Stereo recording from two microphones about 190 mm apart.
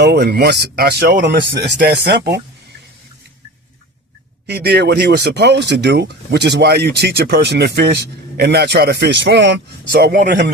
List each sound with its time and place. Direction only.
0.0 s speech: 60° right (ahead or behind)
1.5 s speech: 60° right (ahead or behind)
4.4 s speech: 60° right (ahead or behind)